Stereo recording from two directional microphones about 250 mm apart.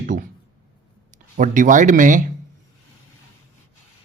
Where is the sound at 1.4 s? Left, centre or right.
Right.